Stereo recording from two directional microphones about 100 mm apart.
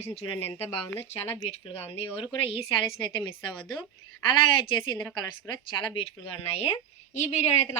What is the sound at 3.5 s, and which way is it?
Speech, 10° left (ahead or behind).